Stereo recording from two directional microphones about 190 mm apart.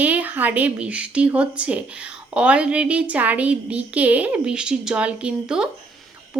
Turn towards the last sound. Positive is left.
turn(degrees=-5)  # may be behind; listen again after turning